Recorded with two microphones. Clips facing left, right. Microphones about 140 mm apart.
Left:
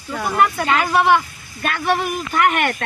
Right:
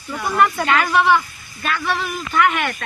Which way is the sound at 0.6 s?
25° left (ahead or behind).